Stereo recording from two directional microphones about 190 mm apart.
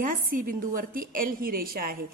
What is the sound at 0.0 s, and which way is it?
A woman's voice, 45° right (ahead or behind).